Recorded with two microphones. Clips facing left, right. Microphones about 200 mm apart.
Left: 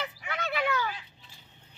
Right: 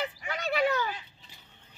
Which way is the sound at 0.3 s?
40° right (ahead or behind).